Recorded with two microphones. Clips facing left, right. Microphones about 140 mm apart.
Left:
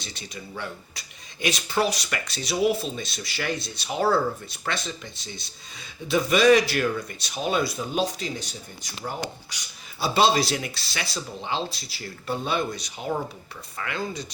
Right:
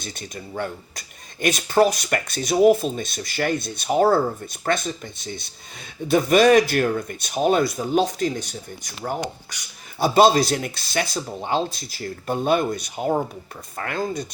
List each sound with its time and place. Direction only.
0.0 s speech: 50° right (ahead or behind)
10.0 s speech: 45° right (ahead or behind)